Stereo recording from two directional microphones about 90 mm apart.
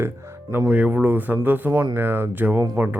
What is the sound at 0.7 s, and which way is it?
Speech, 15° right (ahead or behind).